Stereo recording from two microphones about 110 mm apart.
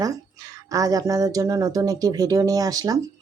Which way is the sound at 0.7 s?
35° right (ahead or behind).